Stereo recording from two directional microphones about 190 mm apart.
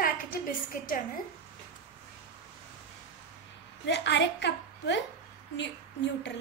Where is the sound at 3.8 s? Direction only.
65° left (ahead or behind).